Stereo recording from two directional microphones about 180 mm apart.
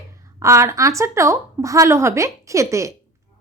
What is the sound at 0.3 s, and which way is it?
A woman's voice, 15° right (ahead or behind).